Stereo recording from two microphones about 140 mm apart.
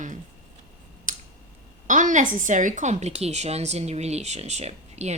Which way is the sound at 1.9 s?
65° right (ahead or behind).